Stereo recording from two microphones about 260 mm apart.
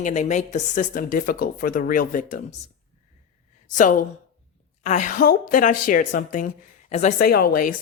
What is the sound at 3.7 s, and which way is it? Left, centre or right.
A woman's voice, left.